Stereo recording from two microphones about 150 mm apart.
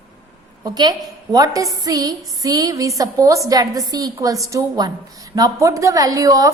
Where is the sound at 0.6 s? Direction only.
25° right (ahead or behind).